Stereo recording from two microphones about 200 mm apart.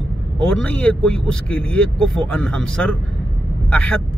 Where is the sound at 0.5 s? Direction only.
5° left (ahead or behind).